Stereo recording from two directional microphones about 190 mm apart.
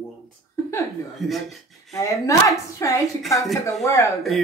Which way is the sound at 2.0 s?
15° left (ahead or behind).